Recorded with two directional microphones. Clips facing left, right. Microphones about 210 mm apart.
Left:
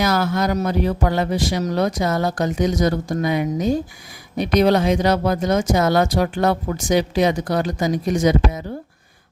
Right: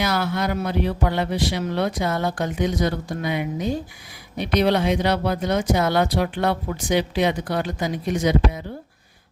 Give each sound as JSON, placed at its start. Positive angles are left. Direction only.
{"t": 0.0, "sound": "speech", "side_deg": 45}